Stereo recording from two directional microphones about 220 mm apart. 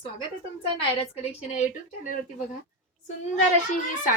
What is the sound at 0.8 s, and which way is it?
Speech, 25° left (ahead or behind).